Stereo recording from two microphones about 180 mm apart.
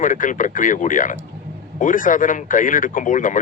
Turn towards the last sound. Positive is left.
turn(degrees=45)  # may be behind; listen again after turning